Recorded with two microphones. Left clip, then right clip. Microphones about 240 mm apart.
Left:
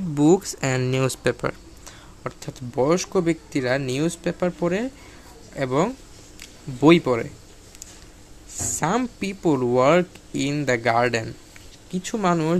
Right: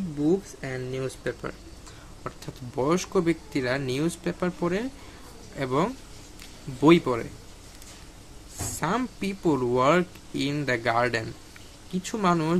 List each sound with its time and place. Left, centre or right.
0.2 s speech: left
2.2 s speech: centre
8.7 s speech: centre